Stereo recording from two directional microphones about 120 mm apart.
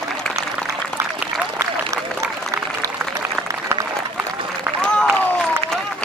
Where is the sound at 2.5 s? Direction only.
25° right (ahead or behind).